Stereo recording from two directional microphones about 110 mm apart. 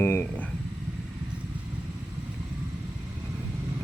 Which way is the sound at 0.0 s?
20° left (ahead or behind).